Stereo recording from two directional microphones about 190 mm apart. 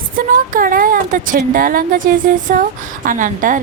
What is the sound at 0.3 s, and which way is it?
A woman's voice, 45° right (ahead or behind).